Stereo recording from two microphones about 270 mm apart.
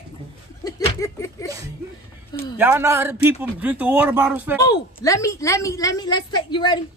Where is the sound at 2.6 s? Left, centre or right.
Centre.